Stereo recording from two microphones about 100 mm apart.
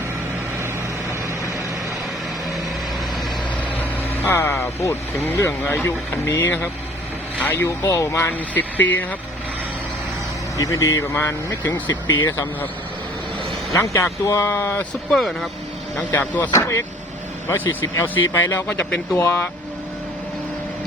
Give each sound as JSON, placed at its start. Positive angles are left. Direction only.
{"t": 4.3, "sound": "speech", "side_deg": 25}
{"t": 8.3, "sound": "speech", "side_deg": 20}
{"t": 10.6, "sound": "speech", "side_deg": 30}
{"t": 13.7, "sound": "speech", "side_deg": 30}
{"t": 15.1, "sound": "speech", "side_deg": 0}
{"t": 16.0, "sound": "speech", "side_deg": 15}
{"t": 16.5, "sound": "speech", "side_deg": 30}